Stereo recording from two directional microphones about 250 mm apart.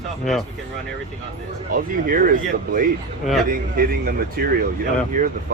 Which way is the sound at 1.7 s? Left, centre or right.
Right.